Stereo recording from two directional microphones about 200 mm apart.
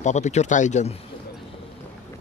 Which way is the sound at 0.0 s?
35° left (ahead or behind).